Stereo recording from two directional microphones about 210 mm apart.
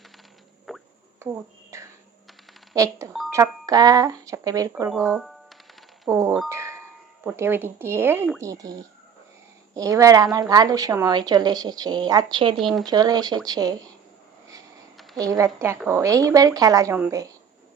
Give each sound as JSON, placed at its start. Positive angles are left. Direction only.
{"t": 0.7, "sound": "plop", "side_deg": 0}
{"t": 1.2, "sound": "a woman's voice", "side_deg": -10}
{"t": 3.1, "sound": "speech", "side_deg": 0}
{"t": 3.3, "sound": "a woman's voice", "side_deg": -15}
{"t": 4.7, "sound": "speech", "side_deg": -5}
{"t": 5.1, "sound": "music", "side_deg": 0}
{"t": 6.1, "sound": "a woman's voice", "side_deg": -15}
{"t": 6.5, "sound": "glockenspiel", "side_deg": -15}
{"t": 7.3, "sound": "a woman's voice", "side_deg": -10}
{"t": 12.5, "sound": "speech", "side_deg": 0}
{"t": 12.8, "sound": "a woman's voice", "side_deg": -20}
{"t": 14.9, "sound": "a sound", "side_deg": 0}
{"t": 15.2, "sound": "a woman's voice", "side_deg": -15}